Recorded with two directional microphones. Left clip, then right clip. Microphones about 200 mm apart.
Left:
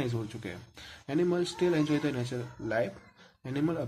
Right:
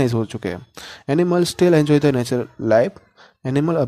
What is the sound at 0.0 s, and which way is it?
Speech, 50° right (ahead or behind).